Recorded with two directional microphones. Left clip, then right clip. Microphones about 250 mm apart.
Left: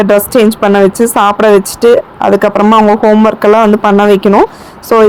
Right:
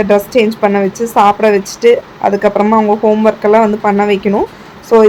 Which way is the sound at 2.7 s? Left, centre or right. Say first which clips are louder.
Left 4 dB; left.